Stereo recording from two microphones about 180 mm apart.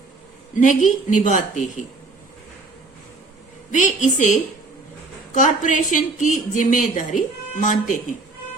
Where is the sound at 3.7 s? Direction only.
45° left (ahead or behind).